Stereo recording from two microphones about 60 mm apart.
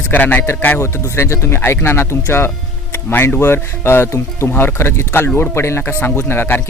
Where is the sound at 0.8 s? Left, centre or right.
Left.